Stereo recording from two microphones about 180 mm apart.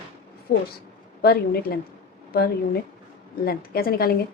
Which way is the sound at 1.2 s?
60° left (ahead or behind).